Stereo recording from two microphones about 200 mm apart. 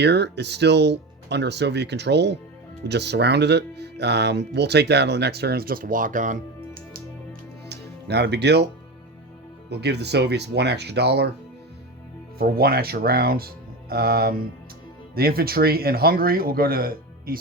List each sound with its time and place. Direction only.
0.0 s speech: 55° right (ahead or behind); by 6.4 s 40° right (ahead or behind)
7.7 s music: 55° right (ahead or behind)
9.6 s speech: 55° right (ahead or behind)
12.4 s speech: 50° right (ahead or behind)